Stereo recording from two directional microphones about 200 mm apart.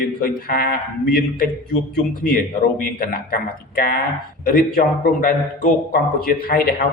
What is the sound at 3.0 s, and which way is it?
A man's voice, 45° left (ahead or behind).